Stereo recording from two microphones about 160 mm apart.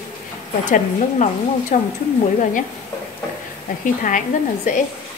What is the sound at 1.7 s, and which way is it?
Speech, 55° left (ahead or behind).